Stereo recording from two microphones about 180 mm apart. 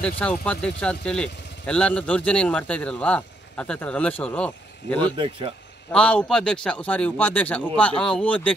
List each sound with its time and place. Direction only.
0.0 s speech: 5° left (ahead or behind)
5.1 s speech: 30° right (ahead or behind)
5.9 s speech: 5° left (ahead or behind)